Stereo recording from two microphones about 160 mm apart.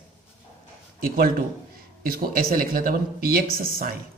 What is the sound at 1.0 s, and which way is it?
Speech, 65° right (ahead or behind).